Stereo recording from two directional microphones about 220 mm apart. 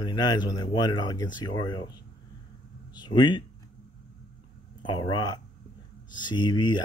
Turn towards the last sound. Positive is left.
turn(degrees=20)  # may be behind; listen again after turning